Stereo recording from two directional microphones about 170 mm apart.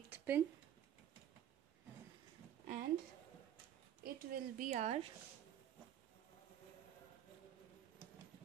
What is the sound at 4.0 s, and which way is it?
A woman's voice, 55° right (ahead or behind).